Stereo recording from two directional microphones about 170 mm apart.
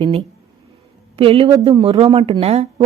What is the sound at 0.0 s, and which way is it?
A woman's voice, 30° right (ahead or behind).